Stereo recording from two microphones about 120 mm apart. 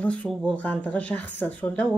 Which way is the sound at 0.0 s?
10° left (ahead or behind).